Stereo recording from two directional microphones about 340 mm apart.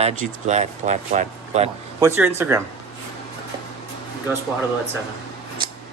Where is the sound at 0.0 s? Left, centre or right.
Centre.